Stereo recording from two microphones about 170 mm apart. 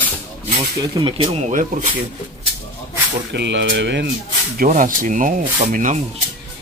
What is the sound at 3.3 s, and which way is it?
Speech, 90° right.